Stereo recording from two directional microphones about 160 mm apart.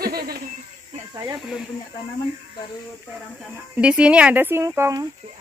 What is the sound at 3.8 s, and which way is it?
Speech, 5° right (ahead or behind).